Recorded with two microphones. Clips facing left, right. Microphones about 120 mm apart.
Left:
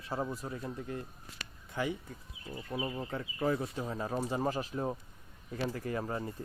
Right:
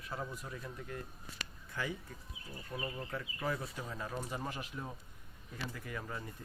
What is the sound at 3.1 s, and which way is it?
Speech, 30° left (ahead or behind).